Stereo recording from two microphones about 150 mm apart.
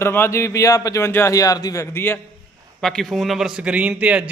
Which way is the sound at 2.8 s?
Centre (ahead or behind).